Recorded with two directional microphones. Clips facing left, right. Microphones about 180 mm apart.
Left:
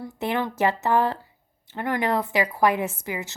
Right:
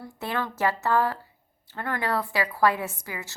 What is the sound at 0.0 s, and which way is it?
A woman's voice, 20° left (ahead or behind).